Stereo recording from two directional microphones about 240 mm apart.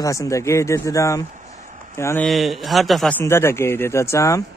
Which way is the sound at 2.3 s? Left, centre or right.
Centre.